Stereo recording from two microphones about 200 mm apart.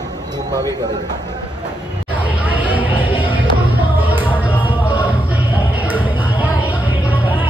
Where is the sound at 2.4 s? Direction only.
10° right (ahead or behind).